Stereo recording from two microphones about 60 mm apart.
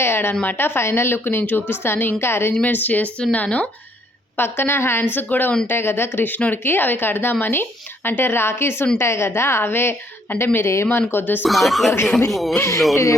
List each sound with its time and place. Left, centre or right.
0.0 s a woman's voice: left
2.5 s speech: left
4.4 s speech: left
5.1 s speech: left
5.6 s a woman's voice: left
11.1 s speech: left
11.4 s speech: centre
12.5 s a woman's voice: left